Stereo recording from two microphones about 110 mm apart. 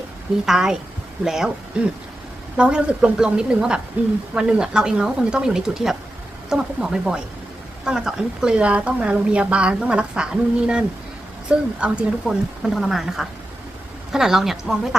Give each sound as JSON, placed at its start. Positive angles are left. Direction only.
{"t": 0.4, "sound": "a woman's voice", "side_deg": -5}
{"t": 11.4, "sound": "speech", "side_deg": -10}